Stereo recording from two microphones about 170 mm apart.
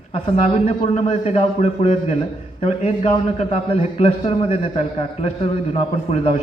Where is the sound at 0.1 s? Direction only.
35° left (ahead or behind).